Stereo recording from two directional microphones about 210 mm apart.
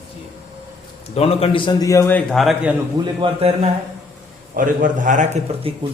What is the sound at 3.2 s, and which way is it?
Speech, 30° right (ahead or behind).